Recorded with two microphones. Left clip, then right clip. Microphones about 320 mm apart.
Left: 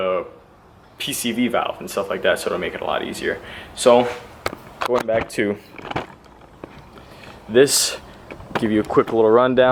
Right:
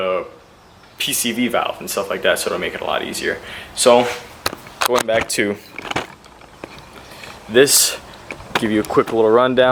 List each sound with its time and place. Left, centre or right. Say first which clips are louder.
0.0 s a sound: right 1 dB; centre
0.9 s speech: right 3 dB; centre
7.5 s speech: right 2 dB; centre